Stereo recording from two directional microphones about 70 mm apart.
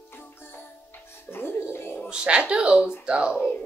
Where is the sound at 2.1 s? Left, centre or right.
Centre.